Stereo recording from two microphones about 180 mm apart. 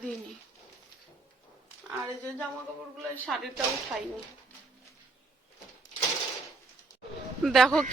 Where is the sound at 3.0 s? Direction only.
Centre (ahead or behind).